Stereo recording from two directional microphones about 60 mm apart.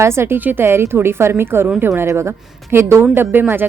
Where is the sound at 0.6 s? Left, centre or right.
Right.